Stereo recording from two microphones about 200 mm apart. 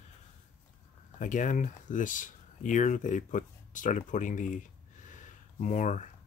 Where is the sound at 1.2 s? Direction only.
40° left (ahead or behind).